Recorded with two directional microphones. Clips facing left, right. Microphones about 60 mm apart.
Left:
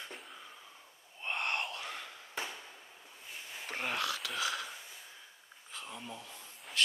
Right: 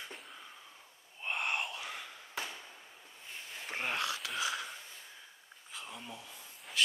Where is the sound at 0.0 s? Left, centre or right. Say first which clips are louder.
Even; centre.